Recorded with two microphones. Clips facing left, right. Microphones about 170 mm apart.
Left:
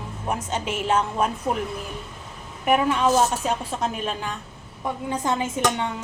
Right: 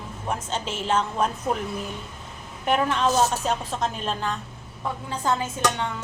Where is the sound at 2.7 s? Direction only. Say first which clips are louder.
Left 3 dB; 10° left (ahead or behind).